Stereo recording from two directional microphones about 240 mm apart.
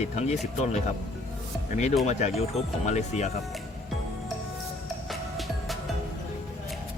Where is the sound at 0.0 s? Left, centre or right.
Left.